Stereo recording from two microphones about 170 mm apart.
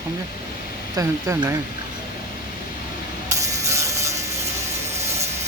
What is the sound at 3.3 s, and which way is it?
Music, 20° right (ahead or behind).